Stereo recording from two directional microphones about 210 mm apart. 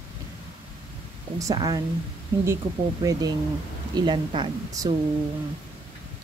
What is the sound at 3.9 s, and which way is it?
Speech, 20° right (ahead or behind).